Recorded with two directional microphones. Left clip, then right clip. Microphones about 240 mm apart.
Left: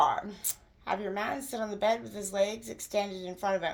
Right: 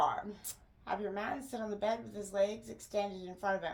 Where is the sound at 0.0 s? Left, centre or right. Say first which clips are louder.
Left 6 dB; left.